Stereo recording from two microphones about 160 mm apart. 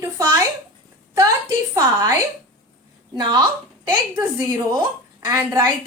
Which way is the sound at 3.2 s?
25° right (ahead or behind).